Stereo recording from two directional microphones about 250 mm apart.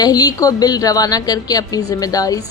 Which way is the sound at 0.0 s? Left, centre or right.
Centre.